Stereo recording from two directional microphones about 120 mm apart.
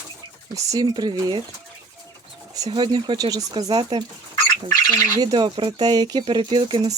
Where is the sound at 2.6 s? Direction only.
35° right (ahead or behind).